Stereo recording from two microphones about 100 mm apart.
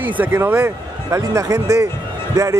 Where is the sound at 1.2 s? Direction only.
35° right (ahead or behind).